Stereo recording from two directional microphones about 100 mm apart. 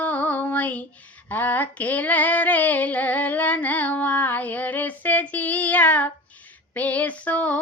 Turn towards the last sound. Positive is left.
turn(degrees=15)  # may be behind; listen again after turning